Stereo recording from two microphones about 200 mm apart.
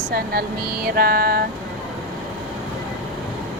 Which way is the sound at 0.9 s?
50° right (ahead or behind).